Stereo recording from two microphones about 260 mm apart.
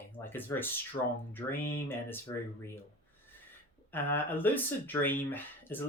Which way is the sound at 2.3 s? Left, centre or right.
Centre.